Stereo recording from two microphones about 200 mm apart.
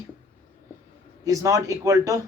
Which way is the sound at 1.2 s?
15° right (ahead or behind).